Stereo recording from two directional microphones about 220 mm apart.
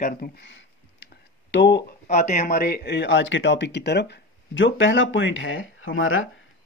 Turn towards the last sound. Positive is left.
turn(degrees=65)  # may be behind; listen again after turning